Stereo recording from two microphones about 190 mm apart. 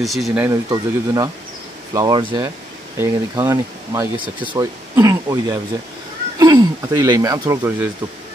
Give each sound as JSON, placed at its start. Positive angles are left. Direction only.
{"t": 0.0, "sound": "speech", "side_deg": 0}
{"t": 0.7, "sound": "speech", "side_deg": -20}